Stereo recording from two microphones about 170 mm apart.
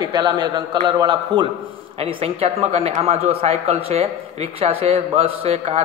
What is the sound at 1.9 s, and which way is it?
A man's voice, 35° right (ahead or behind).